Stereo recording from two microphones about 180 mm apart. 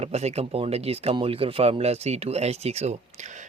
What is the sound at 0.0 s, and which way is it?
Speech, 35° right (ahead or behind).